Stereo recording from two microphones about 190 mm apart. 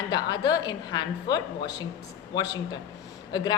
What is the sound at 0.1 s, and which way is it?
A woman's voice, 20° left (ahead or behind).